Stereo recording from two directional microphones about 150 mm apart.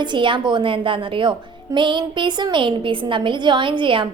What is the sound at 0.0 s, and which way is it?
A woman's voice, 30° right (ahead or behind).